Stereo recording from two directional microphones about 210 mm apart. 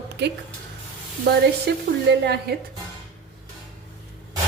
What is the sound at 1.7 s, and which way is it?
Speech, 55° right (ahead or behind).